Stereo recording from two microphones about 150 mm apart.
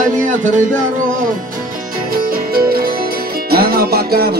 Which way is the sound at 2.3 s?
85° right.